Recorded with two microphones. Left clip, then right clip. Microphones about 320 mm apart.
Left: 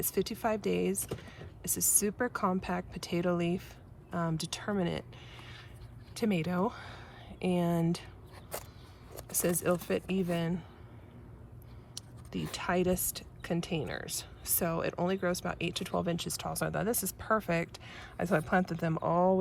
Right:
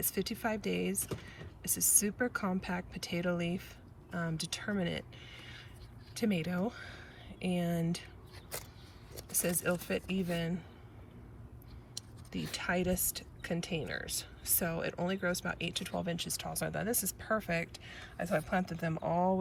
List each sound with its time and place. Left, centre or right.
0.0 s speech: centre
9.6 s speech: centre
11.9 s speech: centre